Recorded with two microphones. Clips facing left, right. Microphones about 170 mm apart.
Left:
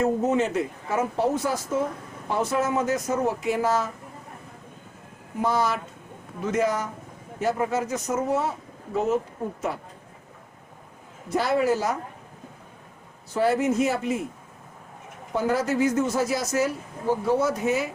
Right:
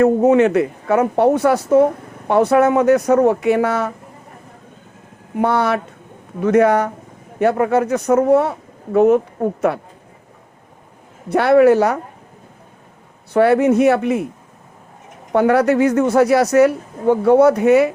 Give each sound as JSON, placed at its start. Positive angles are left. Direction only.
{"t": 0.0, "sound": "speech", "side_deg": -65}
{"t": 5.4, "sound": "speech", "side_deg": -65}
{"t": 11.3, "sound": "speech", "side_deg": -65}
{"t": 13.3, "sound": "speech", "side_deg": -65}
{"t": 15.3, "sound": "speech", "side_deg": -65}